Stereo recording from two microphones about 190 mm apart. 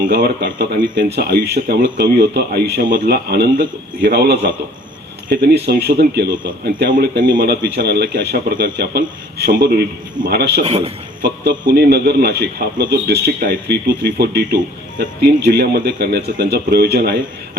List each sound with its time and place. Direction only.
0.0 s a man's voice: 50° right (ahead or behind)
6.2 s speech: 25° right (ahead or behind)
6.7 s speech: 50° right (ahead or behind)
10.6 s a man's voice: 30° right (ahead or behind)
11.7 s a man's voice: 55° right (ahead or behind)
15.4 s a man's voice: 55° right (ahead or behind)